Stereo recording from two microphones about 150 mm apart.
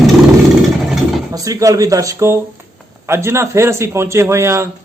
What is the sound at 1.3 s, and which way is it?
Speech, 25° right (ahead or behind).